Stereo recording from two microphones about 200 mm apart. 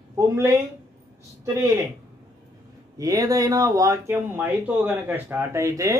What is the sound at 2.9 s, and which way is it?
Speech, 15° right (ahead or behind).